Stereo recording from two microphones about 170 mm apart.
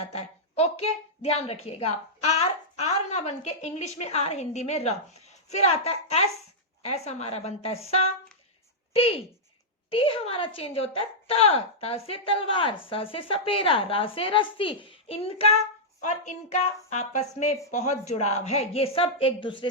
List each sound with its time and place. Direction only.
0.1 s a woman's voice: 40° left (ahead or behind)